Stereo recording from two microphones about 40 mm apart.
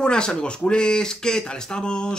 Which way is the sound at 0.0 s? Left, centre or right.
Left.